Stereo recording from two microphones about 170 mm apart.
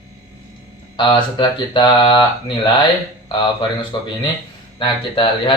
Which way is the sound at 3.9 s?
25° left (ahead or behind).